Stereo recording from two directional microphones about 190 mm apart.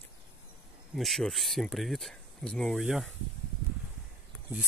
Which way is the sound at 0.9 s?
Centre (ahead or behind).